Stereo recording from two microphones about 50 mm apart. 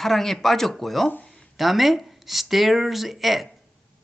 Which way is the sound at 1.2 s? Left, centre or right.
Centre.